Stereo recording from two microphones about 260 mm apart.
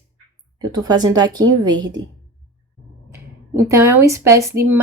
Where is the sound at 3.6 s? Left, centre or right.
Centre.